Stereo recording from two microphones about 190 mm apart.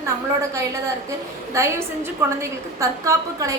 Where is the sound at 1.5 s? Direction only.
15° right (ahead or behind).